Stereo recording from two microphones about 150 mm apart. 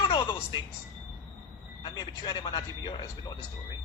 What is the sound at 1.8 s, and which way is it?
Speech, 30° left (ahead or behind).